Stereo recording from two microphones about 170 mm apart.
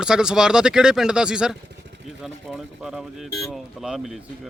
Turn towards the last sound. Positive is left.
turn(degrees=0)  # may be behind; listen again after turning